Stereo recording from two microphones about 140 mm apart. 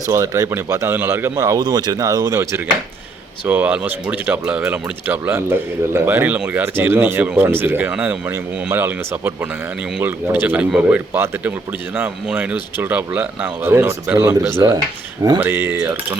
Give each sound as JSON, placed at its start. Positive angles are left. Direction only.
{"t": 0.1, "sound": "speech", "side_deg": -25}
{"t": 14.3, "sound": "speech", "side_deg": -25}
{"t": 15.4, "sound": "speech", "side_deg": -15}